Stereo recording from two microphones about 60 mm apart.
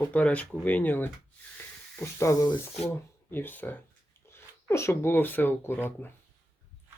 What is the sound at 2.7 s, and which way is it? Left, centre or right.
Speech, left.